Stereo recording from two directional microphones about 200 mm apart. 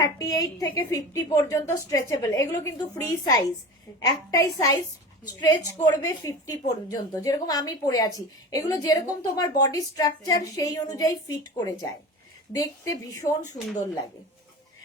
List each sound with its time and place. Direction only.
0.0 s a woman's voice: 15° left (ahead or behind)